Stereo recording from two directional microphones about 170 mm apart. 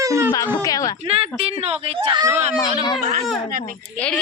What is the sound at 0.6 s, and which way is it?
Speech, 20° left (ahead or behind).